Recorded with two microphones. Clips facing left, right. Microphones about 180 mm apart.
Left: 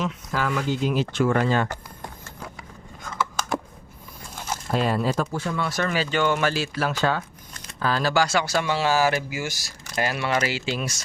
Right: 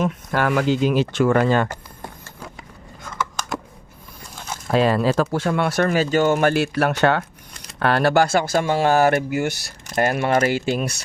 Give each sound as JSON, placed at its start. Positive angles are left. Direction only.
{"t": 0.0, "sound": "speech", "side_deg": -55}
{"t": 4.7, "sound": "speech", "side_deg": -90}
{"t": 5.8, "sound": "speech", "side_deg": -45}